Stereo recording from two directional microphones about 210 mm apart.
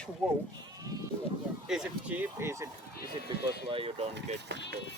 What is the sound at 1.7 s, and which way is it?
Speech, 5° right (ahead or behind).